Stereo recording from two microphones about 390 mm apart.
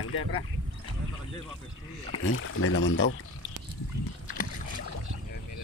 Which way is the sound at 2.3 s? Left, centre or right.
Left.